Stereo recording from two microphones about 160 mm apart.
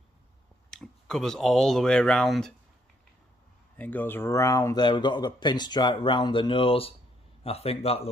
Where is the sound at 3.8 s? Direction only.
10° left (ahead or behind); by 8.1 s 40° left (ahead or behind).